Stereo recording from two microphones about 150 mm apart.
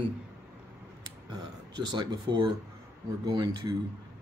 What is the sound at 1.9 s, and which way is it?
Speech, 30° right (ahead or behind).